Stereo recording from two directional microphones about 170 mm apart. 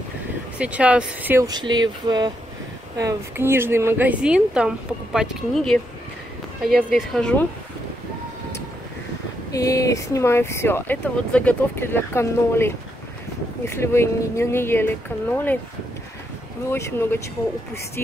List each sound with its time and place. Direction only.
0.6 s speech: 5° right (ahead or behind)
1.4 s a woman's voice: 25° right (ahead or behind); by 7.4 s 5° left (ahead or behind)
9.5 s speech: 20° left (ahead or behind)
16.7 s speech: 15° left (ahead or behind)